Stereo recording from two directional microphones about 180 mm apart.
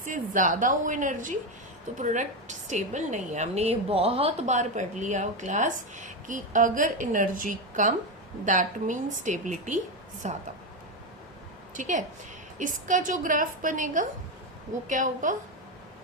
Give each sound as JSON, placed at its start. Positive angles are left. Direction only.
{"t": 0.0, "sound": "a woman's voice", "side_deg": -45}
{"t": 11.7, "sound": "a woman's voice", "side_deg": -45}